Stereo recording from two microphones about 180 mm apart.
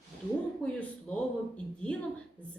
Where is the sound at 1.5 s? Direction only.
5° left (ahead or behind).